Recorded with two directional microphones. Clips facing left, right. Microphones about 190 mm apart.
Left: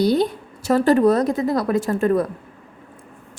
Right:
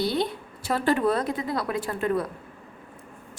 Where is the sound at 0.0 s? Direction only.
45° left (ahead or behind).